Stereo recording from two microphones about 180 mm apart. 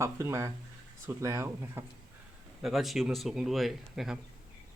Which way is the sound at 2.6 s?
Centre (ahead or behind).